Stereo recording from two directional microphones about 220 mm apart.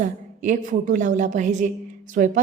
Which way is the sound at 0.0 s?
35° right (ahead or behind).